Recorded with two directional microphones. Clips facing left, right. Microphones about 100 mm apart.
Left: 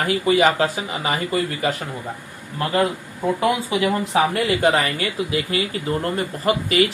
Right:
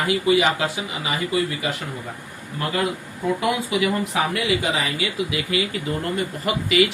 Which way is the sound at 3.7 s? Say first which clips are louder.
Left 2 dB; 30° left (ahead or behind).